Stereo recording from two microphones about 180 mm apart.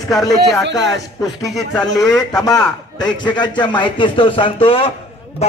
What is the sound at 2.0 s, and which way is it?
A man's voice, 20° left (ahead or behind).